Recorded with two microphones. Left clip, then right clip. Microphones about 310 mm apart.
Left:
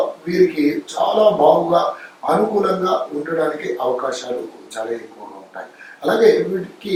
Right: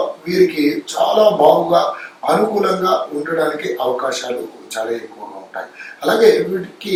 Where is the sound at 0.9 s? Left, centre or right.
Left.